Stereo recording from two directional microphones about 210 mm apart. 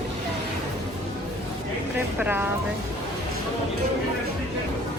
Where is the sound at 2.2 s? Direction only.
10° right (ahead or behind).